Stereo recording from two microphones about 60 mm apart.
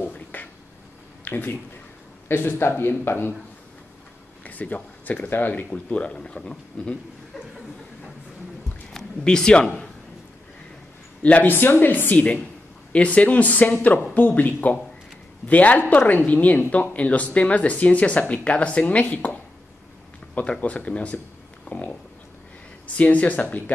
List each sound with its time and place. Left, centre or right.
0.0 s a sound: left
1.2 s speech: left
4.4 s speech: left
8.9 s speech: centre
11.2 s speech: left
20.6 s speech: left
22.9 s speech: left